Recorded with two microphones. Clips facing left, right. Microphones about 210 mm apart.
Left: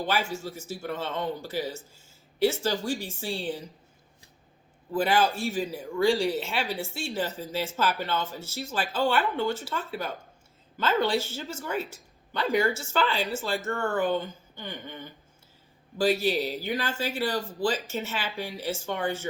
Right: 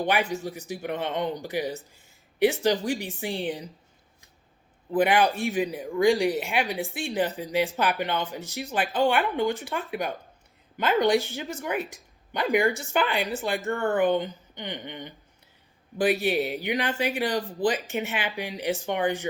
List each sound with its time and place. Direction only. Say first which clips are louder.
0.0 s speech: right 3 dB; 15° right (ahead or behind)
4.9 s speech: right 3 dB; 20° right (ahead or behind)